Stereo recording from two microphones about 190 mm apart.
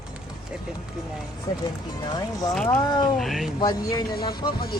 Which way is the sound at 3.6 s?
20° left (ahead or behind).